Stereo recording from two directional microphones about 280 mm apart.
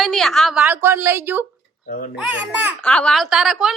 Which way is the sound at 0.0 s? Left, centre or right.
Centre.